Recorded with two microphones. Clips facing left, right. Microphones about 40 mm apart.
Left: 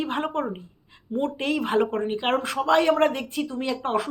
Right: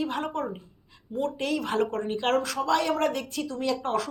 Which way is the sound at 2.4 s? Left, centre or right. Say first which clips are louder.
Left 4 dB; left.